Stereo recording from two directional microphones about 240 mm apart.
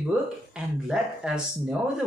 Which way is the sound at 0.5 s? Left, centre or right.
Centre.